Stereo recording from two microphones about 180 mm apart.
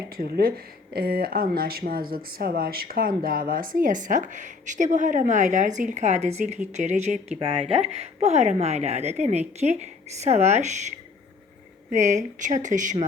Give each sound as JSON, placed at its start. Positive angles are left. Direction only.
{"t": 0.1, "sound": "speech", "side_deg": -55}